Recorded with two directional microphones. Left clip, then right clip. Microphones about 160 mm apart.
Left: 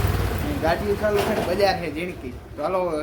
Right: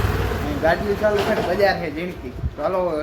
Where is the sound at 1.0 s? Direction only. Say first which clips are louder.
Right 3 dB; 5° right (ahead or behind).